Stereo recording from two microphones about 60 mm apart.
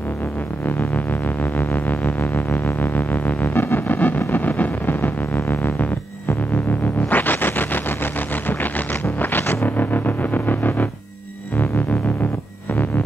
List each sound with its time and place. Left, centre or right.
0.7 s music: left
4.3 s a sound: left
9.2 s music: left